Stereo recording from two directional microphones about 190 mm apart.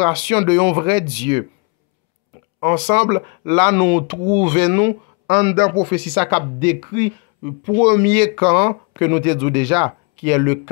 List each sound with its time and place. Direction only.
0.0 s speech: 20° right (ahead or behind)
2.6 s speech: 20° right (ahead or behind)
3.7 s speech: 10° right (ahead or behind)
5.2 s speech: 40° right (ahead or behind); by 10.6 s 15° right (ahead or behind)